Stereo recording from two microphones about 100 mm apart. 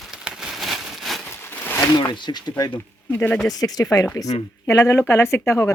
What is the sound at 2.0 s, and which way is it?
Speech, 45° left (ahead or behind).